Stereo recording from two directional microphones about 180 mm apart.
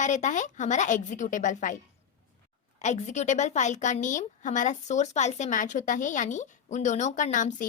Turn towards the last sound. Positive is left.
turn(degrees=45)  # may be behind; listen again after turning